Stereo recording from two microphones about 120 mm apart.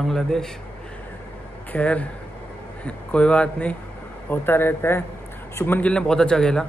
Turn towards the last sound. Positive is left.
turn(degrees=5)  # may be behind; listen again after turning